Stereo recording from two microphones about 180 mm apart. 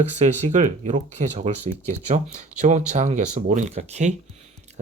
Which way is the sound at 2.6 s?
45° right (ahead or behind).